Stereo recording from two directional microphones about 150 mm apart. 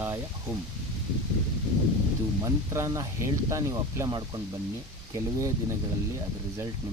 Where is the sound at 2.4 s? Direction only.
20° right (ahead or behind).